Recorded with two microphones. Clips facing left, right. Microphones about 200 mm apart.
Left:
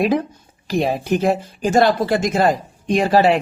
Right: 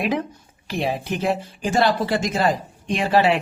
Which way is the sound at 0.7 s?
40° left (ahead or behind).